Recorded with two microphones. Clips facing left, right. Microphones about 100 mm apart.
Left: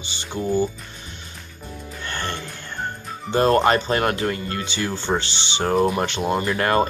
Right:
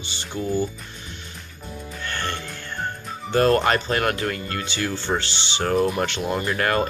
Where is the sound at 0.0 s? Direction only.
20° left (ahead or behind).